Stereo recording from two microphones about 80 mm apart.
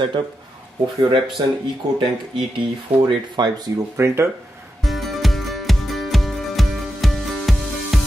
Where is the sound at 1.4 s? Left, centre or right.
Right.